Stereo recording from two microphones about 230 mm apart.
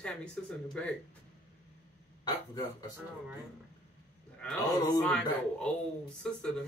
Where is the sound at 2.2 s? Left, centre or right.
Centre.